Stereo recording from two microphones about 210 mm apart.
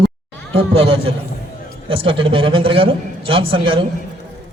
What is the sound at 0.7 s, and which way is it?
A man's voice, 25° right (ahead or behind).